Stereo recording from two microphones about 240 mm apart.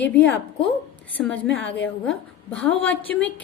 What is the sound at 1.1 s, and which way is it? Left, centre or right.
A woman's voice, centre.